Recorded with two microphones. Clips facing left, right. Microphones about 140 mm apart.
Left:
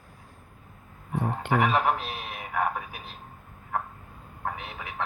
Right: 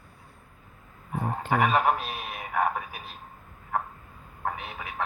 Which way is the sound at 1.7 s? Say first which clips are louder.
Right 1 dB; 5° right (ahead or behind).